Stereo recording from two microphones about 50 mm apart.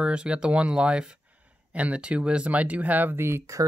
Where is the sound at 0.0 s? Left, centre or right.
Centre; by 3.4 s right.